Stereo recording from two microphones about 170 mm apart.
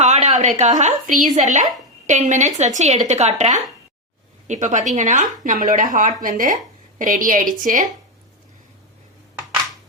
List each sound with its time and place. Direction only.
0.0 s a woman's voice: 40° right (ahead or behind)